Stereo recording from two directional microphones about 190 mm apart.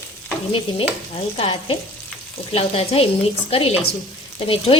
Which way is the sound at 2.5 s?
30° left (ahead or behind).